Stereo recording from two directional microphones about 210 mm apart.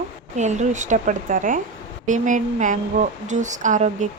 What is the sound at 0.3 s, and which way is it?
A woman's voice, 35° right (ahead or behind).